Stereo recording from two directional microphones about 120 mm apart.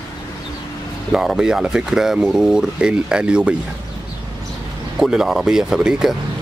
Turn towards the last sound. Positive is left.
turn(degrees=-5)  # may be behind; listen again after turning